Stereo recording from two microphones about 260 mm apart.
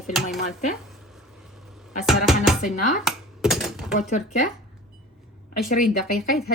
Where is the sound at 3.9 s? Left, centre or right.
Left.